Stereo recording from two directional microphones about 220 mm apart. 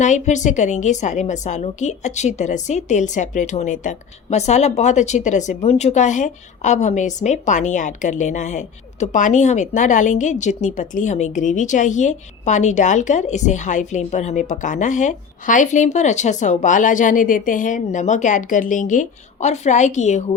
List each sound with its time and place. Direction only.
0.0 s a woman's voice: 35° left (ahead or behind)